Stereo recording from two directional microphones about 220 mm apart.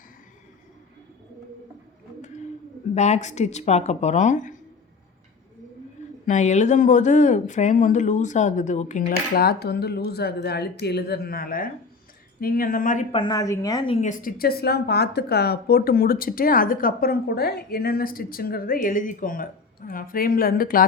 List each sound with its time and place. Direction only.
2.9 s a woman's voice: 30° left (ahead or behind)
6.2 s a woman's voice: 35° left (ahead or behind)
13.1 s a woman's voice: 20° left (ahead or behind); by 20.8 s 40° left (ahead or behind)